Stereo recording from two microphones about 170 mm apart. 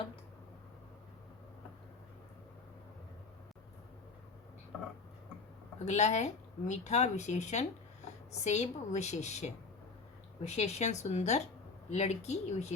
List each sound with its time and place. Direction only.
5.8 s a woman's voice: 40° left (ahead or behind)